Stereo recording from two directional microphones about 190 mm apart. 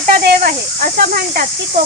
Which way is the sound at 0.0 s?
50° right (ahead or behind).